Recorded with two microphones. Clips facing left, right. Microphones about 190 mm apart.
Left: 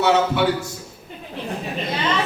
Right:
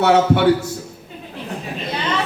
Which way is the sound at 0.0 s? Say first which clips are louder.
Right 4 dB; 60° right (ahead or behind).